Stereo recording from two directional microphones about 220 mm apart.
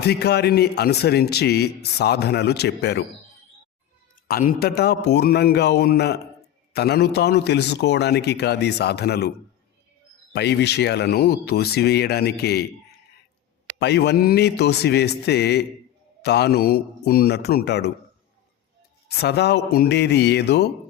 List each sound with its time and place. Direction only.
0.0 s speech: 50° left (ahead or behind)
4.3 s speech: 45° left (ahead or behind)
10.3 s speech: 50° left (ahead or behind)
13.7 s speech: 50° left (ahead or behind)
19.0 s speech: 45° left (ahead or behind)